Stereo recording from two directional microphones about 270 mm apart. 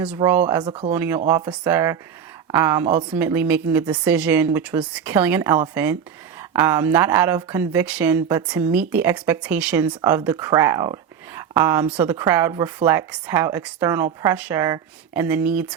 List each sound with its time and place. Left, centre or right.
0.2 s speech: centre
0.7 s speech: right
0.9 s speech: centre